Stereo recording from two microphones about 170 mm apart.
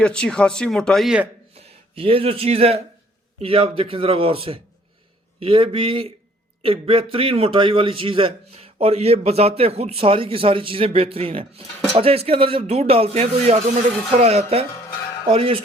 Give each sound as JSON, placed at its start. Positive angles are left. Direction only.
{"t": 0.0, "sound": "speech", "side_deg": 5}
{"t": 1.5, "sound": "a man's voice", "side_deg": -30}